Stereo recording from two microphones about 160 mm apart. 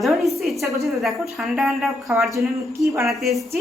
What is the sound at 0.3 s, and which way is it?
A woman's voice, centre (ahead or behind).